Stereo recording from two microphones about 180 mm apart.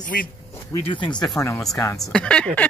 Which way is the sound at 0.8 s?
25° left (ahead or behind).